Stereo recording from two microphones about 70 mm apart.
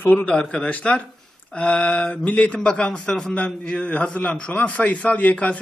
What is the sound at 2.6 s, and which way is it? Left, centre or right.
A man's voice, centre.